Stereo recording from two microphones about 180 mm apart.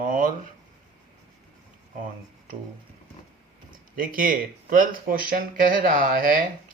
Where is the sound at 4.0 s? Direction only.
50° right (ahead or behind).